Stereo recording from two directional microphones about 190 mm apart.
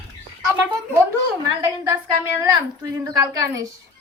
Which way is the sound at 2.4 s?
20° right (ahead or behind).